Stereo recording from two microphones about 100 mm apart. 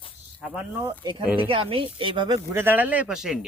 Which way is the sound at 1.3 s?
65° right (ahead or behind).